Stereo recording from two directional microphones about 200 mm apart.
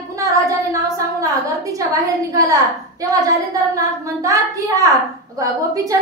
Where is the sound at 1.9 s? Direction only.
15° right (ahead or behind).